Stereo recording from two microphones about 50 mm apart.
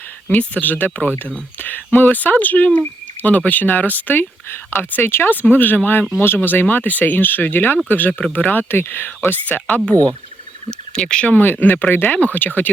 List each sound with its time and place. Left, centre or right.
0.3 s speech: left
9.5 s speech: left
10.7 s speech: centre
11.3 s speech: left